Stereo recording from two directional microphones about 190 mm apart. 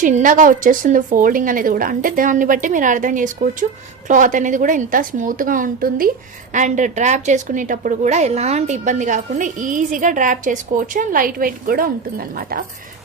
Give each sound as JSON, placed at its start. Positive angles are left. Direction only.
{"t": 0.0, "sound": "a woman's voice", "side_deg": -40}